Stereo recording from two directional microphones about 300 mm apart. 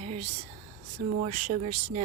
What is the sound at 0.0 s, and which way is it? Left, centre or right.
Whispering, right.